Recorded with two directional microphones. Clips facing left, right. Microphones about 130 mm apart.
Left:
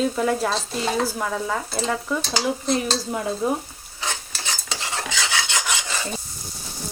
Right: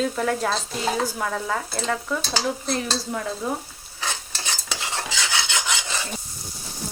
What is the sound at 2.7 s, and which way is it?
Stir, 20° left (ahead or behind).